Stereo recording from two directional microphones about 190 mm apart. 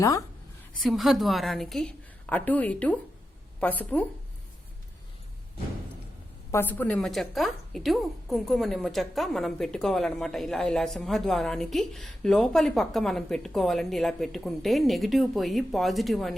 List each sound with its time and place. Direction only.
0.0 s speech: 15° left (ahead or behind)
0.8 s a woman's voice: centre (ahead or behind)
6.5 s a woman's voice: 10° left (ahead or behind)